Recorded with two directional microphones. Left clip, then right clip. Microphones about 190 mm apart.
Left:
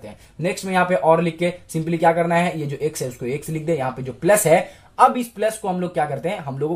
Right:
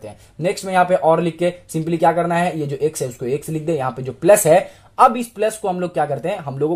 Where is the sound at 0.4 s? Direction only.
40° right (ahead or behind).